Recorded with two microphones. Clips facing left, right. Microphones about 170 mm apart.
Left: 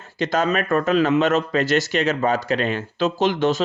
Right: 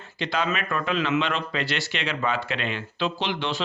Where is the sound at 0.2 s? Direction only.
45° left (ahead or behind).